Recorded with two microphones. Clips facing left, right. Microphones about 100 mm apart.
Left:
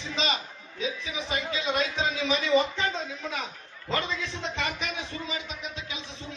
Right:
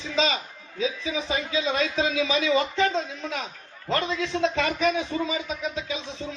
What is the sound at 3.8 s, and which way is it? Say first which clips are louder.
Speech: right 4 dB; 90° right.